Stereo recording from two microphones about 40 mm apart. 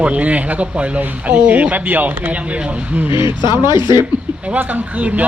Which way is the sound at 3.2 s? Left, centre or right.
Right.